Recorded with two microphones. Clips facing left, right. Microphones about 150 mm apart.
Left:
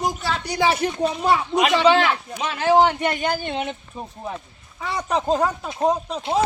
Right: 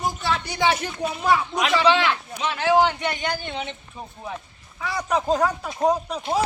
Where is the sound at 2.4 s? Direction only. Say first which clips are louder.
Left 2 dB; 40° left (ahead or behind).